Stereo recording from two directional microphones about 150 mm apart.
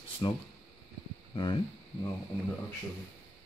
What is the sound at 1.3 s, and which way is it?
Speech, 35° left (ahead or behind).